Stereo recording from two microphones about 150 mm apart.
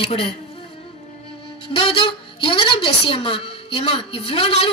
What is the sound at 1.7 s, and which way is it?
A woman's voice, 35° left (ahead or behind).